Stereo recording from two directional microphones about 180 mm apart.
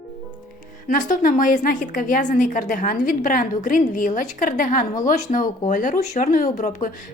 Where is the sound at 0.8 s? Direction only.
45° left (ahead or behind).